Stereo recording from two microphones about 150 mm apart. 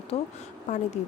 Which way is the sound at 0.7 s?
55° left (ahead or behind).